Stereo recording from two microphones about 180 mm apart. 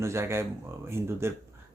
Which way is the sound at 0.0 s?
15° right (ahead or behind).